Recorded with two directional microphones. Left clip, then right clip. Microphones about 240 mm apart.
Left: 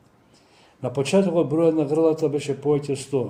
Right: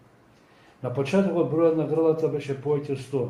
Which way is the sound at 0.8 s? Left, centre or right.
Left.